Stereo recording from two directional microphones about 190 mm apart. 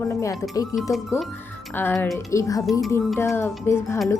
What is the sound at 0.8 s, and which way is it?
Speech, centre (ahead or behind).